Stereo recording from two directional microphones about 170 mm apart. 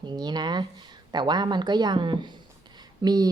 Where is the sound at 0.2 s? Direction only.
25° right (ahead or behind).